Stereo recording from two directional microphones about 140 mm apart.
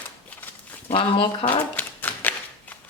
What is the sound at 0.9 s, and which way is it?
Speech, 40° left (ahead or behind).